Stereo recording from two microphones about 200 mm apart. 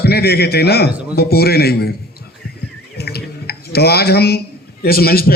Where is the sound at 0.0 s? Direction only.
55° left (ahead or behind).